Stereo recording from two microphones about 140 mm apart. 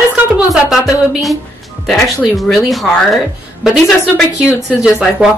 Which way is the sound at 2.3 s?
Centre (ahead or behind).